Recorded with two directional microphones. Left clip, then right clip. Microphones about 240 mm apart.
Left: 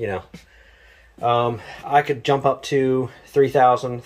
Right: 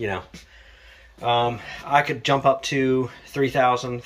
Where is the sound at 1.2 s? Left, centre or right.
Left.